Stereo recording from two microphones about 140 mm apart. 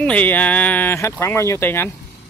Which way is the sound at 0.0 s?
10° left (ahead or behind).